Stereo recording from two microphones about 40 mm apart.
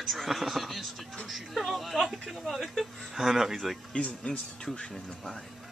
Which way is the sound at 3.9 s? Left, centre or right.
Left.